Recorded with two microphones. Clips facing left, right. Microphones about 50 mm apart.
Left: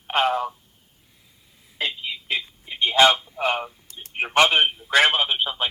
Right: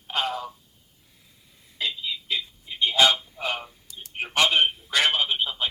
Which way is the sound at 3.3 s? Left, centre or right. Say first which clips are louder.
Left 6 dB; left.